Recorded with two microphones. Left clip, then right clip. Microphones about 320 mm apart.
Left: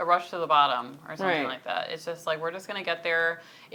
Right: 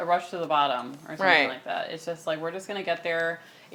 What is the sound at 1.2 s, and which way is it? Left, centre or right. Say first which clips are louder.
Speech: right 6 dB; right.